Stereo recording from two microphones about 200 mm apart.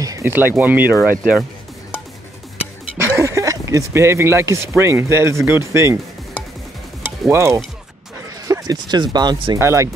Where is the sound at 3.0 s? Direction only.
15° right (ahead or behind).